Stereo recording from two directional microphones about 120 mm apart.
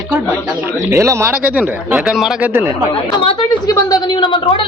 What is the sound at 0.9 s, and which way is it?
Speech, 25° right (ahead or behind).